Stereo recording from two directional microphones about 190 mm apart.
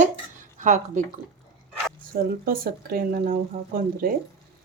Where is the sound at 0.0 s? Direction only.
40° right (ahead or behind).